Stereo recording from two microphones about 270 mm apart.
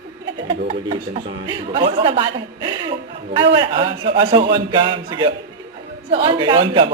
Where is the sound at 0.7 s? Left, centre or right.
Centre.